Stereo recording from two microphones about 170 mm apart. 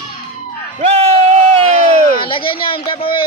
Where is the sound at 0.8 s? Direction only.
35° right (ahead or behind).